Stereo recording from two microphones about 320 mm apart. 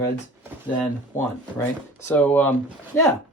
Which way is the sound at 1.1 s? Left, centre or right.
Centre.